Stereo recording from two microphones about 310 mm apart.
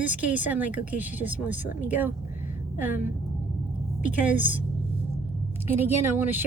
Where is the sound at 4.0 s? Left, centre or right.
Centre.